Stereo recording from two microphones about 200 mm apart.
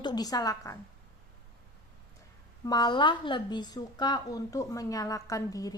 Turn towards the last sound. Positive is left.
turn(degrees=15)  # may be behind; listen again after turning